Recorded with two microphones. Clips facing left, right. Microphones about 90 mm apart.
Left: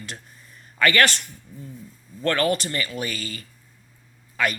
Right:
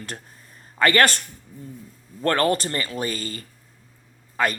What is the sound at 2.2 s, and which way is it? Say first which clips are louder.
Speech: right 1 dB; 40° right (ahead or behind).